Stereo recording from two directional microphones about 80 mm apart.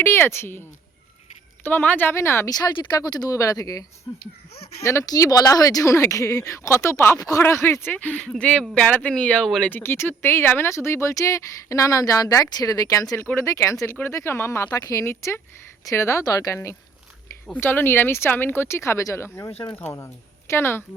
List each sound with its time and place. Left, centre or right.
0.0 s speech: left
1.6 s speech: left
2.1 s speech: left
2.5 s speech: left
7.9 s speech: centre
9.6 s speech: left
13.8 s speech: left
14.1 s speech: left
14.7 s speech: left
15.0 s speech: left
17.6 s speech: left